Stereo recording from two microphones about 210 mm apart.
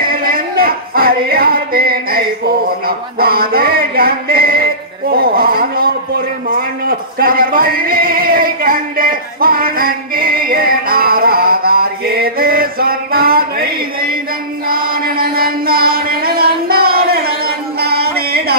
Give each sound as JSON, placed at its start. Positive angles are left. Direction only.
{"t": 0.0, "sound": "music", "side_deg": -45}
{"t": 5.1, "sound": "a man's voice", "side_deg": -45}
{"t": 14.7, "sound": "music", "side_deg": -45}